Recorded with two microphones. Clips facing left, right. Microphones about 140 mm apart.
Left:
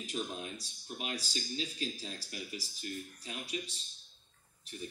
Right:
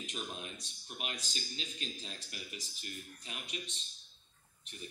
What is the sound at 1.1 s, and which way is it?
Speech, 35° left (ahead or behind).